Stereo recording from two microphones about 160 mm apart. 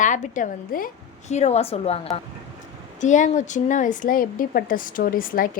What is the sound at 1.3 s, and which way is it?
Speech, 45° left (ahead or behind).